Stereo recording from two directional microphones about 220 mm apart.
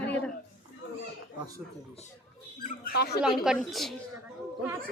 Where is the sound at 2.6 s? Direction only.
40° left (ahead or behind).